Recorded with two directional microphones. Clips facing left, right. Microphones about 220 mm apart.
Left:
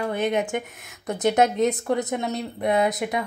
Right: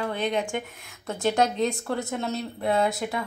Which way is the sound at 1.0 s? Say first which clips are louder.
Left 3 dB; 20° left (ahead or behind).